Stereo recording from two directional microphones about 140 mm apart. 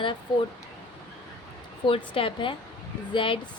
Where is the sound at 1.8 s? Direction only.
40° left (ahead or behind).